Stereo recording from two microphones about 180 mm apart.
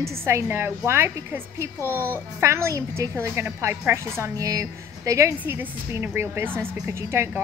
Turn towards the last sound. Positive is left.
turn(degrees=-15)  # may be behind; listen again after turning